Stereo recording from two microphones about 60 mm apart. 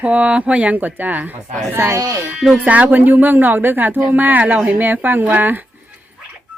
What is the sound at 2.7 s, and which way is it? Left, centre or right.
Speech, right.